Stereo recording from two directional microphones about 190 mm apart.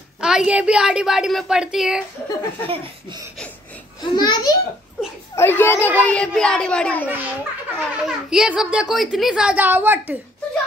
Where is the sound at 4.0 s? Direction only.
25° left (ahead or behind).